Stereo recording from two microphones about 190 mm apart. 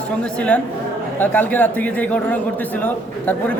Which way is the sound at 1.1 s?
10° left (ahead or behind).